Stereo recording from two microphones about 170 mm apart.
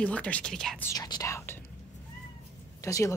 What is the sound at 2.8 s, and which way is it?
Speech, 20° left (ahead or behind).